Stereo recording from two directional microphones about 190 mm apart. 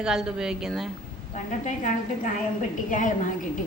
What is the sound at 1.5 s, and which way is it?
A woman's voice, 40° left (ahead or behind).